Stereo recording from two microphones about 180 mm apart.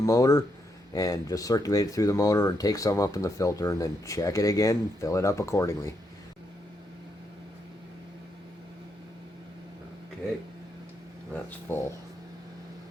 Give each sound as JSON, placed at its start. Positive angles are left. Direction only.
{"t": 0.0, "sound": "speech", "side_deg": 20}
{"t": 11.7, "sound": "speech", "side_deg": 10}